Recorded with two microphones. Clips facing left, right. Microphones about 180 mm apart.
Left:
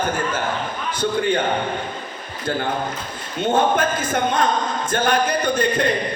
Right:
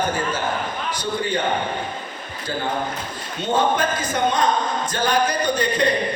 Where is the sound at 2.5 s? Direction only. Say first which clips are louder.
Left 2 dB; 55° left (ahead or behind).